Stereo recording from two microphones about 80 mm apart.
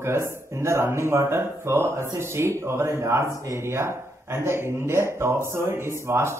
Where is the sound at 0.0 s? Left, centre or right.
Right.